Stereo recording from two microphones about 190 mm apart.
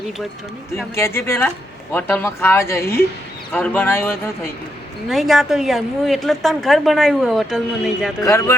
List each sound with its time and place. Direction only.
0.9 s speech: 15° left (ahead or behind)
5.0 s a woman's voice: centre (ahead or behind)
8.2 s speech: 15° left (ahead or behind)